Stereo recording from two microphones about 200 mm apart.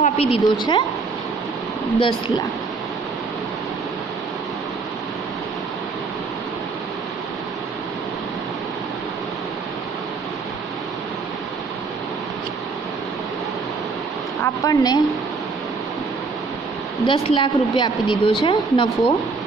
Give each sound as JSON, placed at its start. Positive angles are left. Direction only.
{"t": 0.0, "sound": "a woman's voice", "side_deg": 30}
{"t": 2.0, "sound": "speech", "side_deg": 20}
{"t": 14.4, "sound": "speech", "side_deg": 15}
{"t": 17.1, "sound": "speech", "side_deg": 25}